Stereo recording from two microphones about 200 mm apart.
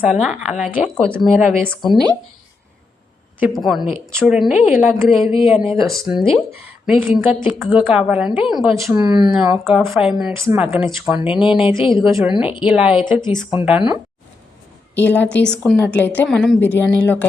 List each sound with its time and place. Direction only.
0.0 s a woman's voice: centre (ahead or behind)
1.4 s a woman's voice: 10° right (ahead or behind)
3.4 s a woman's voice: centre (ahead or behind)
8.7 s speech: 15° right (ahead or behind)
9.2 s a woman's voice: 5° right (ahead or behind)
11.8 s speech: 25° left (ahead or behind)
12.7 s a woman's voice: 5° right (ahead or behind)
13.0 s speech: 25° left (ahead or behind)
13.6 s a woman's voice: 5° right (ahead or behind)
14.9 s a woman's voice: 10° left (ahead or behind)